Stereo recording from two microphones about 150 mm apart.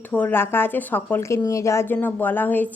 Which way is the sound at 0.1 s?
10° left (ahead or behind).